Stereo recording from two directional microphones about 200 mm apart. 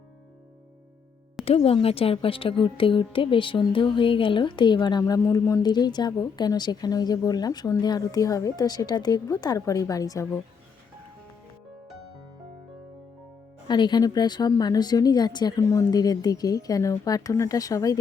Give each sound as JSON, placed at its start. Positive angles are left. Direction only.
{"t": 1.5, "sound": "speech", "side_deg": 30}
{"t": 13.7, "sound": "speech", "side_deg": 20}